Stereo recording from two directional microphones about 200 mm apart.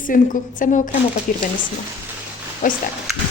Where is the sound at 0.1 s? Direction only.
40° left (ahead or behind).